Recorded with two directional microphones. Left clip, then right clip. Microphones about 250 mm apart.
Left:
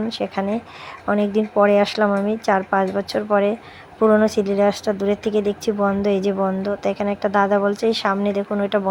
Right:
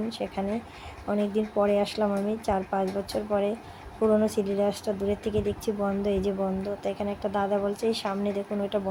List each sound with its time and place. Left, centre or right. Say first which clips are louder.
0.1 s speech: left 8 dB; centre